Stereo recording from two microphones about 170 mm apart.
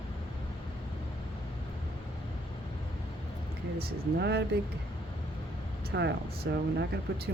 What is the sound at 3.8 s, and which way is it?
Speech, 70° right (ahead or behind).